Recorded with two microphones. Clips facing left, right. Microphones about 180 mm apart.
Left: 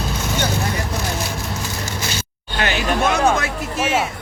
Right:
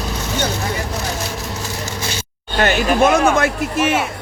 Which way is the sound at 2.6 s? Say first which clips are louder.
Right 5 dB; 45° right (ahead or behind).